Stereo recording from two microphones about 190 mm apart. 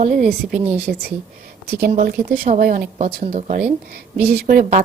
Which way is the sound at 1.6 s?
60° right (ahead or behind).